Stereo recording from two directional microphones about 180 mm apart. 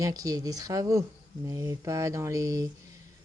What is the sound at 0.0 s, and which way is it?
Speech, 20° right (ahead or behind).